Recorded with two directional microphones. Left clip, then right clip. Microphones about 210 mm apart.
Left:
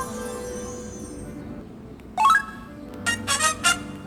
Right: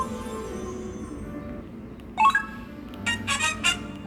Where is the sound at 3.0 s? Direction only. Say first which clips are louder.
Left 2 dB; 30° left (ahead or behind).